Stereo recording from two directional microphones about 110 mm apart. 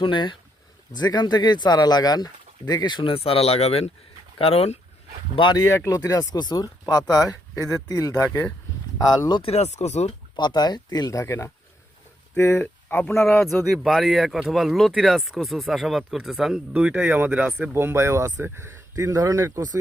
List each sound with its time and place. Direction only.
0.0 s speech: 45° left (ahead or behind); by 4.8 s 70° left (ahead or behind)
5.5 s speech: 25° left (ahead or behind)
9.4 s speech: 75° left (ahead or behind)
10.3 s speech: 40° left (ahead or behind); by 13.2 s 20° left (ahead or behind)
13.2 s speech: 5° left (ahead or behind); by 19.8 s 30° right (ahead or behind)